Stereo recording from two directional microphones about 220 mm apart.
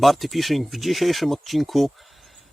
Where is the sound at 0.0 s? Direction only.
Centre (ahead or behind).